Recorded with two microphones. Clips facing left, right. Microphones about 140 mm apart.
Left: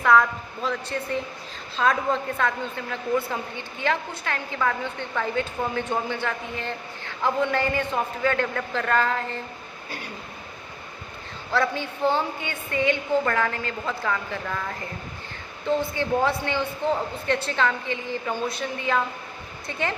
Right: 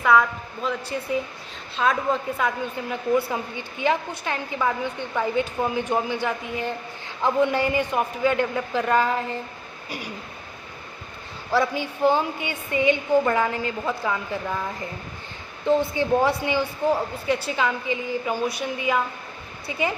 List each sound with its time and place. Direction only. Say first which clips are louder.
0.0 s a woman's voice: even; 5° right (ahead or behind)
11.5 s a woman's voice: right 2 dB; 15° right (ahead or behind)
15.6 s a woman's voice: right 4 dB; 15° right (ahead or behind)